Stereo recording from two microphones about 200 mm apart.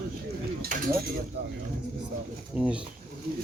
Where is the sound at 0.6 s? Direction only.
40° right (ahead or behind).